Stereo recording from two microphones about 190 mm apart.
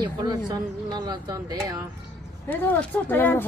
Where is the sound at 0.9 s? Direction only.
20° right (ahead or behind).